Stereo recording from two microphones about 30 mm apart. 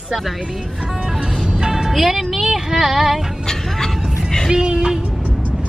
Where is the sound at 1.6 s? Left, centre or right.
Right.